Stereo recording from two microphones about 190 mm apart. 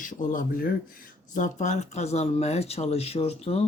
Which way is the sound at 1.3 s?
40° left (ahead or behind).